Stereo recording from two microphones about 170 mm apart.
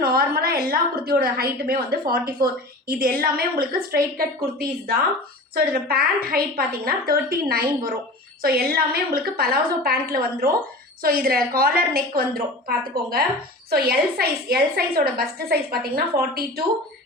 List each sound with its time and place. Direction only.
0.0 s a woman's voice: 65° right (ahead or behind)